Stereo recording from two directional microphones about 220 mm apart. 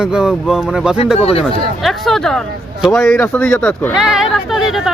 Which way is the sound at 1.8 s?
Centre (ahead or behind).